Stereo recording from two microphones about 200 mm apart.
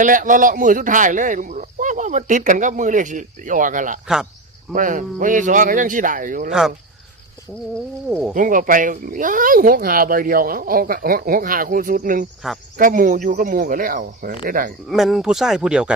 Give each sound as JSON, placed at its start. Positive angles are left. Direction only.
{"t": 0.0, "sound": "speech", "side_deg": -40}
{"t": 6.5, "sound": "speech", "side_deg": 0}
{"t": 8.4, "sound": "speech", "side_deg": -40}
{"t": 14.8, "sound": "speech", "side_deg": 0}